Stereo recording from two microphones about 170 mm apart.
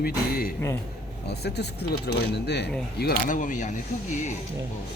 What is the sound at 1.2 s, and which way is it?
Speech, 75° left (ahead or behind).